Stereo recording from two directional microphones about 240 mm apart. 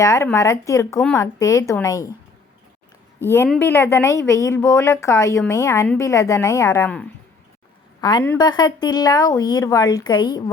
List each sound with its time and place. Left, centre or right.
0.0 s a woman's voice: centre
3.2 s a woman's voice: centre